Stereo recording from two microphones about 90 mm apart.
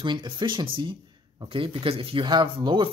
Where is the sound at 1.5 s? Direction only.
85° right; by 2.9 s 60° right (ahead or behind).